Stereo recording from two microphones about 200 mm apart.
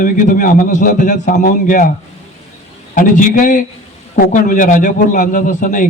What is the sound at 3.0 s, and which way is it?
A man's voice, 40° left (ahead or behind).